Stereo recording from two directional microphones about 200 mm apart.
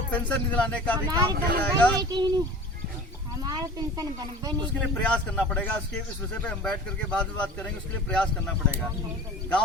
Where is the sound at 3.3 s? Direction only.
20° right (ahead or behind).